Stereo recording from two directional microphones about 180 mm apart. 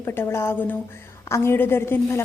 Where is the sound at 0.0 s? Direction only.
15° left (ahead or behind).